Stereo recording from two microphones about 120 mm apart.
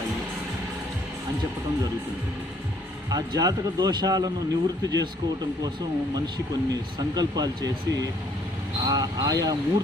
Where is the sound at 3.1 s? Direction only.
35° right (ahead or behind).